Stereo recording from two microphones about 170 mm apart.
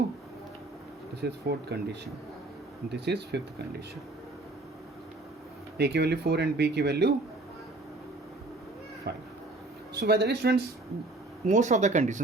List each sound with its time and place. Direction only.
1.2 s speech: 75° right (ahead or behind)
5.7 s speech: 75° right (ahead or behind)
9.1 s speech: 75° right (ahead or behind)
11.4 s speech: 45° right (ahead or behind)